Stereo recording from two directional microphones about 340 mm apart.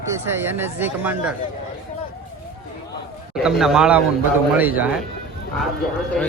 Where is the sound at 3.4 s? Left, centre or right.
Centre.